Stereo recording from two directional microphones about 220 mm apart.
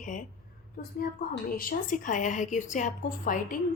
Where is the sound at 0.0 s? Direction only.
35° left (ahead or behind).